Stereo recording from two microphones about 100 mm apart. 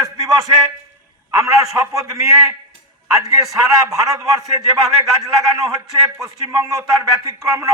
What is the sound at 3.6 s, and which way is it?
A man's voice, 30° right (ahead or behind).